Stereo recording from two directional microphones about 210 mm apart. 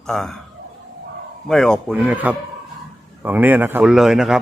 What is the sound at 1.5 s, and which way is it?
Speech, centre (ahead or behind).